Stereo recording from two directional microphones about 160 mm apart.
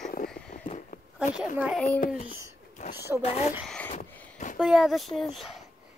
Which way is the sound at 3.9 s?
50° left (ahead or behind).